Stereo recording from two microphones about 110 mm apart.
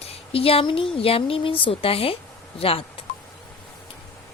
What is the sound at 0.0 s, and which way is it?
A woman's voice, 60° left (ahead or behind).